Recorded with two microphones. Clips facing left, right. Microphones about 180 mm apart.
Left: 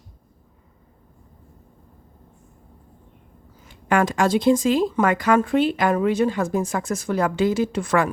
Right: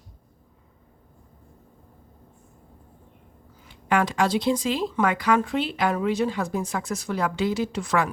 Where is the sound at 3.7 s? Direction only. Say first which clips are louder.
Left 3 dB; 45° left (ahead or behind).